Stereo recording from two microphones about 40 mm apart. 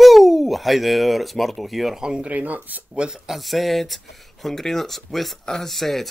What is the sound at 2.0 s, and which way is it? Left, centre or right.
Speech, centre.